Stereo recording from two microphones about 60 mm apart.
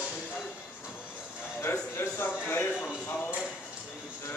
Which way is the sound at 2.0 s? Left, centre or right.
Left.